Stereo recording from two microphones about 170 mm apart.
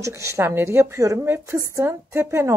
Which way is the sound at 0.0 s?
15° right (ahead or behind).